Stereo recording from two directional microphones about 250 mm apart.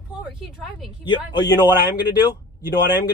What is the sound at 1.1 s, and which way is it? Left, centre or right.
Speech, centre.